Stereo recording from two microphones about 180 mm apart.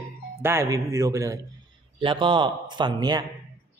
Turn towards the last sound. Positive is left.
turn(degrees=-25)  # may be behind; listen again after turning